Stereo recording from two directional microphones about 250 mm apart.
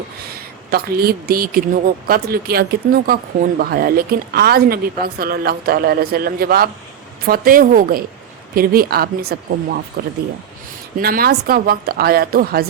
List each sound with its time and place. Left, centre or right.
0.3 s speech: right